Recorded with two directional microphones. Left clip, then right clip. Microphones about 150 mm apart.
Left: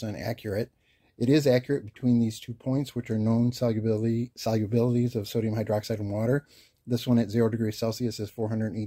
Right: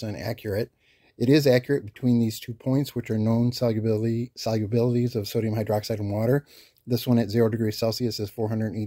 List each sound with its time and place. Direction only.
0.0 s speech: 10° right (ahead or behind)